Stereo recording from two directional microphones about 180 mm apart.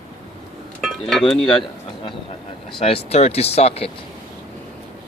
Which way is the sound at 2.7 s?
30° left (ahead or behind).